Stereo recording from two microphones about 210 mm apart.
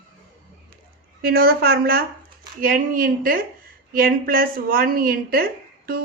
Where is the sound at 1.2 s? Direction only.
45° right (ahead or behind).